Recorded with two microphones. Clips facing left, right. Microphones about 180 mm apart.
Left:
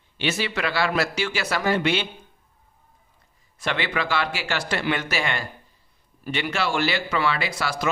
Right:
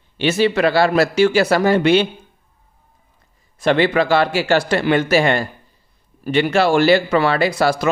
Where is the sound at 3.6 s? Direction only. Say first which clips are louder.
Right 11 dB; 40° right (ahead or behind).